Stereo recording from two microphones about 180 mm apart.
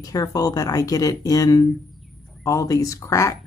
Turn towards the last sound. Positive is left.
turn(degrees=15)  # may be behind; listen again after turning